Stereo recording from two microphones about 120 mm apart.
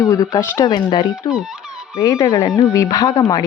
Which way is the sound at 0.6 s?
40° left (ahead or behind).